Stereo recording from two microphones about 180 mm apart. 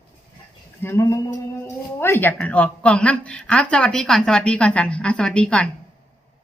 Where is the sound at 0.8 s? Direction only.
15° left (ahead or behind).